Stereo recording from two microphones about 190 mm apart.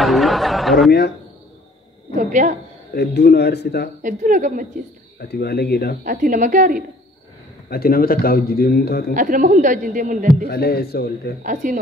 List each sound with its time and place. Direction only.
0.0 s a sound: centre (ahead or behind)
2.1 s a woman's voice: 45° right (ahead or behind)
2.9 s speech: 60° left (ahead or behind)
4.0 s a woman's voice: 40° right (ahead or behind)
5.2 s speech: 55° left (ahead or behind)
6.0 s a woman's voice: 45° right (ahead or behind)
7.7 s a man's voice: 50° left (ahead or behind)
9.1 s a woman's voice: 45° right (ahead or behind)
10.4 s speech: 55° left (ahead or behind)
11.4 s a woman's voice: 45° right (ahead or behind)